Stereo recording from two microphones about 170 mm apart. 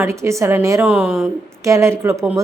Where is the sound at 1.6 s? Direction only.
15° right (ahead or behind).